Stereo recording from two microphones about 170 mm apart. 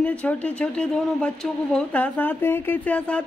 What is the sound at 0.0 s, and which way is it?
Speech, 10° left (ahead or behind).